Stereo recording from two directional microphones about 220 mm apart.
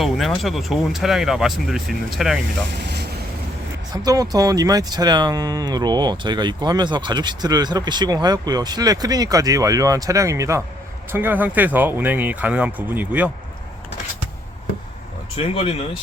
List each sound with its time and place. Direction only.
0.0 s speech: centre (ahead or behind)
2.7 s vehicle: 50° right (ahead or behind)
3.9 s speech: 15° right (ahead or behind)
15.4 s speech: 25° left (ahead or behind)